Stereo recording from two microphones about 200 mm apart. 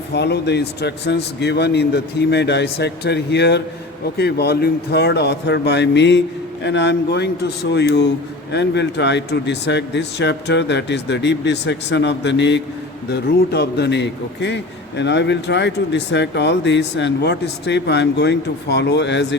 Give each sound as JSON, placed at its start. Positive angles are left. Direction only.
{"t": 0.1, "sound": "a man's voice", "side_deg": 55}